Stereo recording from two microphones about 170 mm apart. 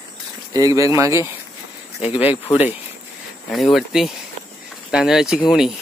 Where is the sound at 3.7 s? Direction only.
Centre (ahead or behind).